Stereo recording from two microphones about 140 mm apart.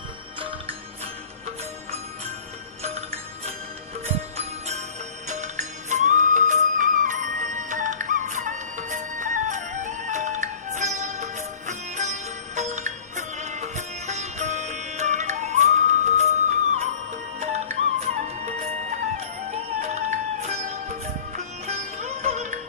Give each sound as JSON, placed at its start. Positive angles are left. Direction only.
{"t": 4.4, "sound": "music", "side_deg": -50}
{"t": 18.0, "sound": "music", "side_deg": -55}